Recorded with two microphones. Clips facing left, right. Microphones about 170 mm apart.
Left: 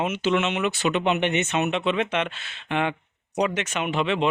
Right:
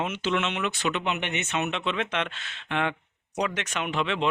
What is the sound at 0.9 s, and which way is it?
Speech, 25° left (ahead or behind).